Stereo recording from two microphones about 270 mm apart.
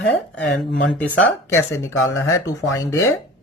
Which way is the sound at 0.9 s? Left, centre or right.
Centre.